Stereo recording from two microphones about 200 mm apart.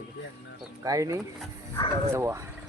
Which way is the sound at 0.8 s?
15° right (ahead or behind).